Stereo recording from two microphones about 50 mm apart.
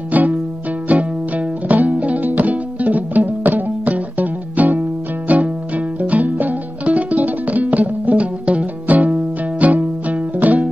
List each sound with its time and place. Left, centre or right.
0.1 s music: right